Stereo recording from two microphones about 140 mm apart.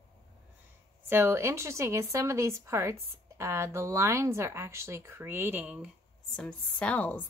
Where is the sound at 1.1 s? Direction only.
20° right (ahead or behind).